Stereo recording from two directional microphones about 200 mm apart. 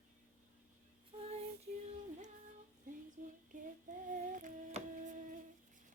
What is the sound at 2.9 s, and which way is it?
Child singing, 40° right (ahead or behind).